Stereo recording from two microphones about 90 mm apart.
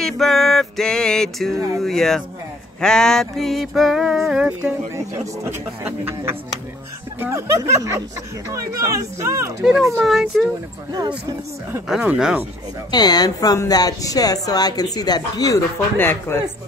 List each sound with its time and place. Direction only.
0.0 s music: 5° left (ahead or behind)
1.8 s a sound: 5° left (ahead or behind)
4.9 s speech: 30° right (ahead or behind)
7.3 s speech: 35° right (ahead or behind)
9.7 s a sound: 5° right (ahead or behind)
10.9 s speech: 50° right (ahead or behind)
11.9 s a sound: 5° right (ahead or behind)
12.9 s speech: 50° left (ahead or behind)
16.0 s speech: 25° left (ahead or behind)